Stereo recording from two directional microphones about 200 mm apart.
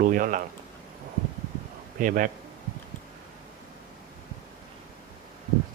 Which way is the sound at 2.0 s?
40° right (ahead or behind).